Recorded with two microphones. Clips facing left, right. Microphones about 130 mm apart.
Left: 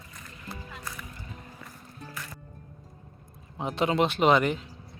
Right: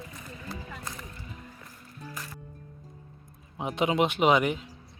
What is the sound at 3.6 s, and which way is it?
Speech, 10° right (ahead or behind).